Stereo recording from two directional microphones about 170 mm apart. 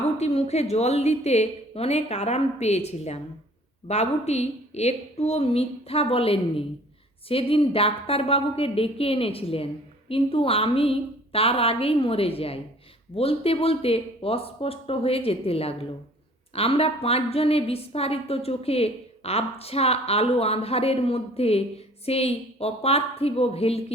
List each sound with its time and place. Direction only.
0.2 s a woman's voice: 40° left (ahead or behind)